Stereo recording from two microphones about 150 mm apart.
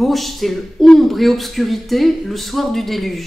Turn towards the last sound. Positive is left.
turn(degrees=0)  # may be behind; listen again after turning